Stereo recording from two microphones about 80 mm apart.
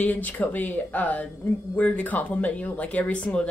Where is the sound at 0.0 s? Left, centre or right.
Left.